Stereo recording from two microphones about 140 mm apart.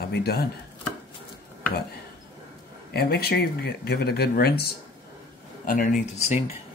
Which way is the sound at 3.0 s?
90° left.